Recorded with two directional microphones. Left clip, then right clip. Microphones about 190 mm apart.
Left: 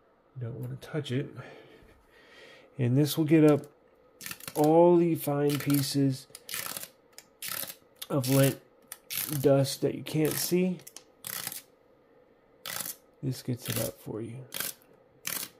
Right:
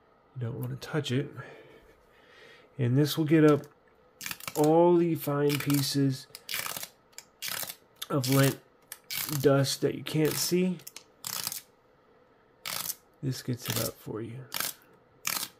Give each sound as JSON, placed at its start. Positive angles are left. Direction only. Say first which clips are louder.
{"t": 0.4, "sound": "speech", "louder": "right 3 dB", "side_deg": -25}
{"t": 1.3, "sound": "speech", "louder": "right 1 dB", "side_deg": 15}
{"t": 2.2, "sound": "a sound", "louder": "left 1 dB", "side_deg": 15}
{"t": 2.8, "sound": "speech", "louder": "even", "side_deg": 0}
{"t": 8.0, "sound": "speech", "louder": "even", "side_deg": 0}
{"t": 13.2, "sound": "speech", "louder": "even", "side_deg": -5}